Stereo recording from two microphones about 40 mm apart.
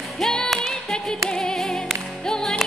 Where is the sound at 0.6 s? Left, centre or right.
Centre.